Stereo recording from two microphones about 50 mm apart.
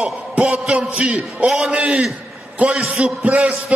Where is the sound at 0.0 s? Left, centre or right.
Right.